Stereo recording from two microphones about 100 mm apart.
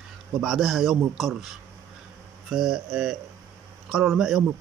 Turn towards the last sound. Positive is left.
turn(degrees=0)  # may be behind; listen again after turning